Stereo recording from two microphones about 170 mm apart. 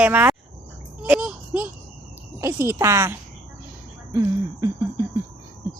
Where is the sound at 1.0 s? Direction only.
5° right (ahead or behind).